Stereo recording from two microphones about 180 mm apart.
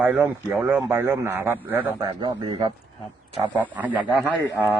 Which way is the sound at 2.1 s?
25° right (ahead or behind).